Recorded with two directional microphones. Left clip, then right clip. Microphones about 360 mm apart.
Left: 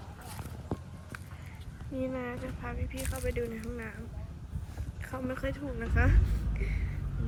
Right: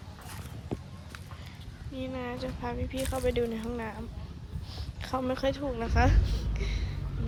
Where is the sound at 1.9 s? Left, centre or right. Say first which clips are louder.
Even; centre.